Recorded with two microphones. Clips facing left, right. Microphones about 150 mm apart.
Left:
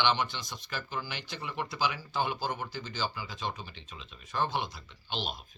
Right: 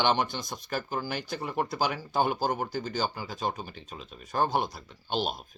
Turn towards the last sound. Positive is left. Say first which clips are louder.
# right 7 dB
turn(degrees=-45)  # may be behind; listen again after turning